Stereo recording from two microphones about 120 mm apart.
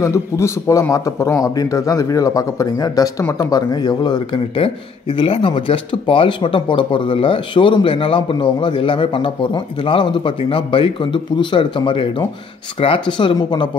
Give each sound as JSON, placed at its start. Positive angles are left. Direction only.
{"t": 0.0, "sound": "a man's voice", "side_deg": 25}
{"t": 4.6, "sound": "speech", "side_deg": 45}